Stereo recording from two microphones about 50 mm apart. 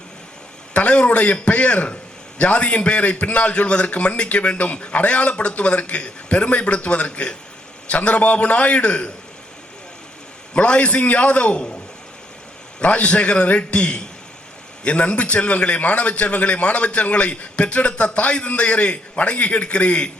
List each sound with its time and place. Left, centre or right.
0.7 s a man's voice: left
10.5 s a man's voice: left
12.8 s a man's voice: left